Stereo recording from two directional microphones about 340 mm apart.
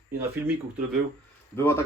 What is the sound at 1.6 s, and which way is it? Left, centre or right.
Speech, centre.